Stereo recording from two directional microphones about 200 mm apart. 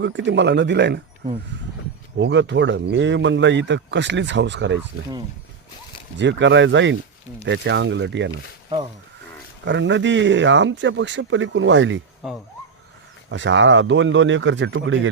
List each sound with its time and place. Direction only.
0.0 s speech: 65° right (ahead or behind)
2.1 s speech: 60° right (ahead or behind)
6.1 s speech: 65° right (ahead or behind)
9.6 s speech: 65° right (ahead or behind)
12.2 s speech: 5° right (ahead or behind)
13.3 s speech: 65° right (ahead or behind)